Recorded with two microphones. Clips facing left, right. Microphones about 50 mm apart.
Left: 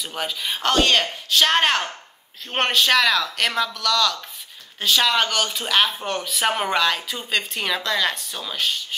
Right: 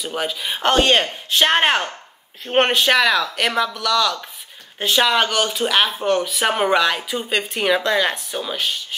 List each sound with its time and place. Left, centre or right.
0.0 s speech: centre
0.6 s speech: right